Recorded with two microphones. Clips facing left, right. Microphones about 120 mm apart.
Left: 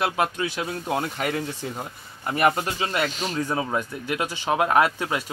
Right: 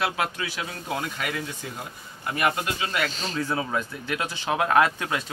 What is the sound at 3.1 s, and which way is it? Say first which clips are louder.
Speech: left 2 dB; 15° left (ahead or behind).